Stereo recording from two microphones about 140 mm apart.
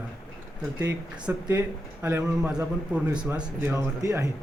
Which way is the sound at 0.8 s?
15° right (ahead or behind).